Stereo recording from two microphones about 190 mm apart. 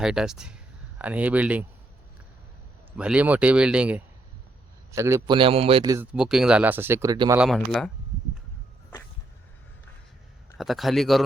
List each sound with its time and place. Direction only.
0.0 s speech: 5° right (ahead or behind)
2.9 s a man's voice: 5° right (ahead or behind)
6.1 s speech: 5° right (ahead or behind)
7.3 s speech: centre (ahead or behind)
10.6 s speech: centre (ahead or behind)